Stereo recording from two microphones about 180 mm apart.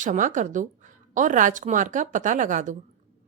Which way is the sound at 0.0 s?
45° right (ahead or behind).